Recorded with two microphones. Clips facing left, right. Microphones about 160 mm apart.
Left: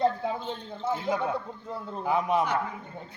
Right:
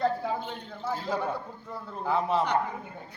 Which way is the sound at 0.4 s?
20° left (ahead or behind).